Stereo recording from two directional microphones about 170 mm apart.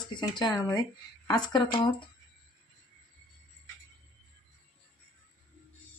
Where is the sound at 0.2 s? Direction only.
25° left (ahead or behind).